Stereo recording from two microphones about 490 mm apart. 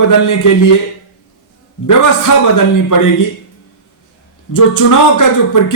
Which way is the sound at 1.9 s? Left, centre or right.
Left.